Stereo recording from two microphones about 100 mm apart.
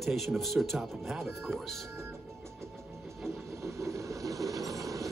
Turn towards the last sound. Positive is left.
turn(degrees=-35)  # may be behind; listen again after turning